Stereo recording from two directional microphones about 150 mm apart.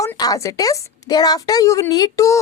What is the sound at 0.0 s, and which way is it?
A woman's voice, 25° left (ahead or behind).